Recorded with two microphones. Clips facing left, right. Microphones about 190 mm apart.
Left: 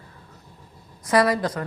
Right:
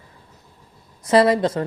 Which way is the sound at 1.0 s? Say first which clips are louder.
Right 4 dB; 25° right (ahead or behind).